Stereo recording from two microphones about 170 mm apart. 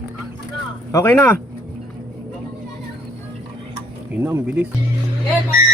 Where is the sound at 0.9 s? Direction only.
15° left (ahead or behind).